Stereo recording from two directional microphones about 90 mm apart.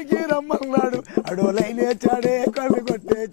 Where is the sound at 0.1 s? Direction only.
15° left (ahead or behind).